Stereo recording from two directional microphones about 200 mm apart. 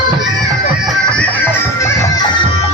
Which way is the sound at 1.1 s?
5° left (ahead or behind).